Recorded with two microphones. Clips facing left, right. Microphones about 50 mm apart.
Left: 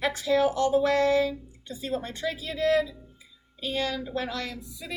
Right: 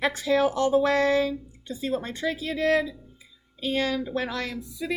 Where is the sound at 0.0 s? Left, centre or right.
Right.